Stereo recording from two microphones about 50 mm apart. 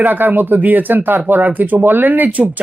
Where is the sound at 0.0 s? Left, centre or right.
Right.